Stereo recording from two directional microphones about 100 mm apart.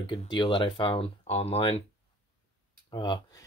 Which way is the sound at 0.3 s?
50° left (ahead or behind).